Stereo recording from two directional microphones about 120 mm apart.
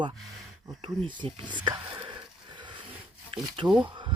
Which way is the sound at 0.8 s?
40° right (ahead or behind).